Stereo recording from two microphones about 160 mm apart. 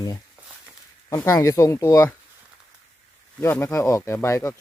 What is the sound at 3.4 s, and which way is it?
Speech, 15° left (ahead or behind).